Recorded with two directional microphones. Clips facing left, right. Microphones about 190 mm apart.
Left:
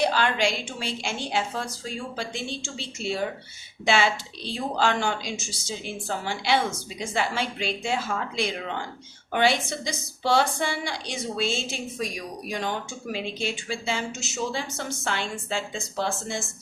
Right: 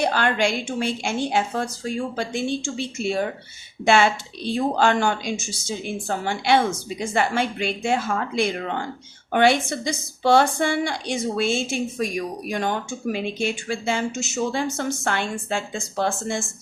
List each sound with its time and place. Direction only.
0.0 s a woman's voice: 50° right (ahead or behind)